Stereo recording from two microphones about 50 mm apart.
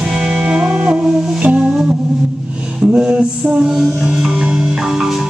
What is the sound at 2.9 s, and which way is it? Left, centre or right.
Music, right.